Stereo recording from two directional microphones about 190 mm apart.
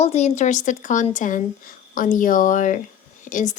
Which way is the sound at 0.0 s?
35° left (ahead or behind).